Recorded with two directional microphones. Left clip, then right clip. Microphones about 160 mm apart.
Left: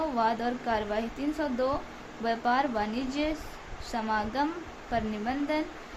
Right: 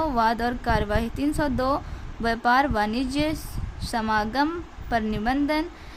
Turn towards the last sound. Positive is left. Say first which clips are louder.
# right 6 dB
turn(degrees=-50)  # may be behind; listen again after turning